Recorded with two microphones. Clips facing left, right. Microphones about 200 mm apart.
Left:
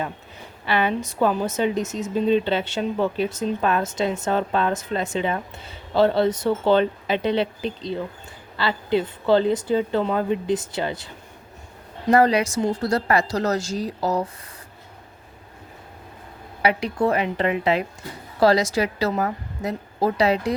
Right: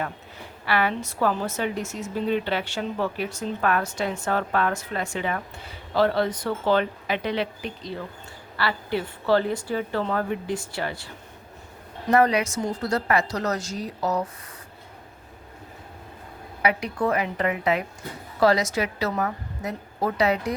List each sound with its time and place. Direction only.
0.6 s a woman's voice: 20° left (ahead or behind)
12.1 s a woman's voice: 30° left (ahead or behind)
16.6 s a woman's voice: 30° left (ahead or behind)